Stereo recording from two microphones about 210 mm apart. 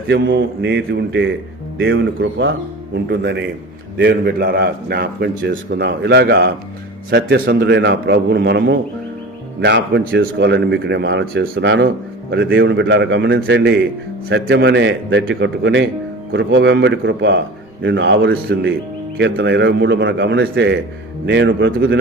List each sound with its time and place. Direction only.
0.1 s speech: 60° right (ahead or behind)
3.1 s a man's voice: 50° right (ahead or behind)